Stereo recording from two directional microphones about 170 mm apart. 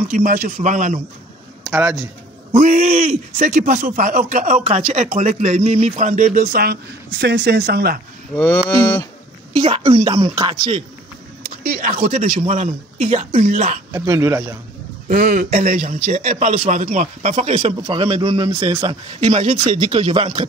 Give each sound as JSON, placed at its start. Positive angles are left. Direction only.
{"t": 0.1, "sound": "speech", "side_deg": -50}
{"t": 1.7, "sound": "a man's voice", "side_deg": -15}
{"t": 2.7, "sound": "speech", "side_deg": -55}
{"t": 8.6, "sound": "livestock", "side_deg": 15}
{"t": 9.6, "sound": "speech", "side_deg": -30}
{"t": 10.2, "sound": "speech", "side_deg": -20}
{"t": 11.6, "sound": "speech", "side_deg": -45}
{"t": 13.9, "sound": "speech", "side_deg": -20}
{"t": 15.0, "sound": "speech", "side_deg": -45}